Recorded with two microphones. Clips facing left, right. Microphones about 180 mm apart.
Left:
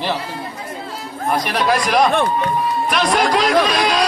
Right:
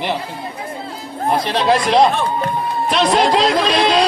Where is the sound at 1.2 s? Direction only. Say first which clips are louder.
Right 2 dB; 25° right (ahead or behind).